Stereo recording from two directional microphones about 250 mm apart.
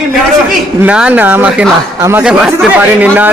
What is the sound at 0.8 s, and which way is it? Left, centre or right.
A man's voice, centre.